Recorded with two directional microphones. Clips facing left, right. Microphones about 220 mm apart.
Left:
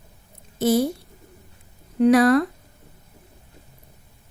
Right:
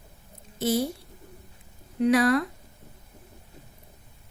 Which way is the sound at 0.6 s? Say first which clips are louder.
Left 6 dB; 45° left (ahead or behind).